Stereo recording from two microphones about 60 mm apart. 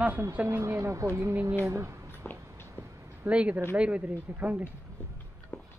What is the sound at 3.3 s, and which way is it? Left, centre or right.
Speech, right.